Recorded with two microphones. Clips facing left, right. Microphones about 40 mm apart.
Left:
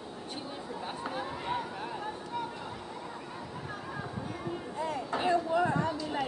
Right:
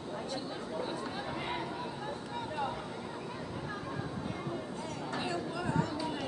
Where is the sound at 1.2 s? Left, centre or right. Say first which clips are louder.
Left 2 dB; centre.